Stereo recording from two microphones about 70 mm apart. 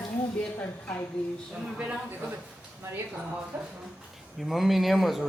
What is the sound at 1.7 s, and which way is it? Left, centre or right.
Speech, centre.